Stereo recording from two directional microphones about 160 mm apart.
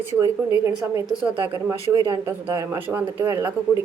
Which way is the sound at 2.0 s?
20° right (ahead or behind).